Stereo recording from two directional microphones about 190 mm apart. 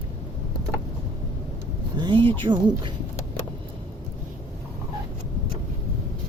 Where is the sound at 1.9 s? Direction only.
25° right (ahead or behind).